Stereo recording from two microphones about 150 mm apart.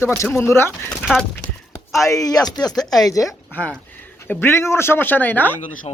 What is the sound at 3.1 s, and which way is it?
A woman's voice, 20° left (ahead or behind).